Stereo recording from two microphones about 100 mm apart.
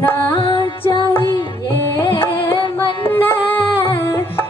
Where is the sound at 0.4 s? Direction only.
65° left (ahead or behind).